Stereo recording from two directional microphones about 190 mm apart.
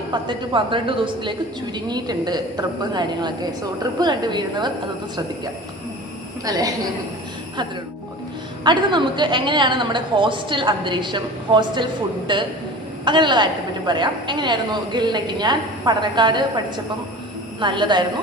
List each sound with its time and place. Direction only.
0.1 s a woman's voice: 25° right (ahead or behind)
6.4 s a woman's voice: 20° right (ahead or behind)
8.6 s a woman's voice: 25° right (ahead or behind)
17.6 s a woman's voice: 25° right (ahead or behind)